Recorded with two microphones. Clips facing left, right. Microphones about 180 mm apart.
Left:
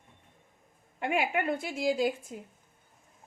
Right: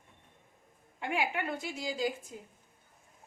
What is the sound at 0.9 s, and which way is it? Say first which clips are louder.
A woman's voice: left 4 dB; 60° left (ahead or behind).